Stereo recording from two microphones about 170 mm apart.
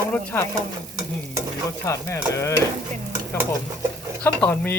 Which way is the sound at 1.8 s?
15° left (ahead or behind).